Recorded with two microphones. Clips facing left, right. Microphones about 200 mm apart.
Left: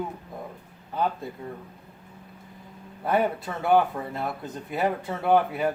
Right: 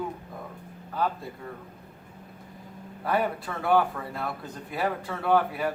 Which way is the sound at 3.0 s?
20° left (ahead or behind).